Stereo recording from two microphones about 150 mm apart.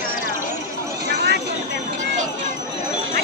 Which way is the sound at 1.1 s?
90° right.